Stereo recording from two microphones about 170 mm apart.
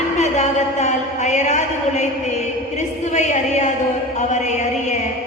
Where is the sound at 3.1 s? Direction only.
40° left (ahead or behind).